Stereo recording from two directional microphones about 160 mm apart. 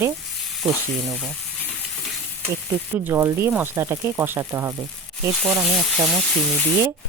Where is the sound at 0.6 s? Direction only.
Centre (ahead or behind).